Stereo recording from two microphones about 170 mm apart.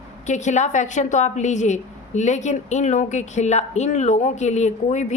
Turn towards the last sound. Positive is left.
turn(degrees=45)  # may be behind; listen again after turning